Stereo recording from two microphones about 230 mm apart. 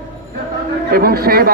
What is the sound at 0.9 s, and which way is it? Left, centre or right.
Speech, right.